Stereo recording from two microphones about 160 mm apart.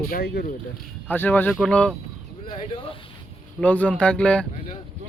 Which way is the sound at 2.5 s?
35° left (ahead or behind).